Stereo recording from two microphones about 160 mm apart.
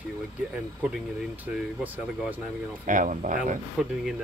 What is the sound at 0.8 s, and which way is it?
Speech, 10° right (ahead or behind).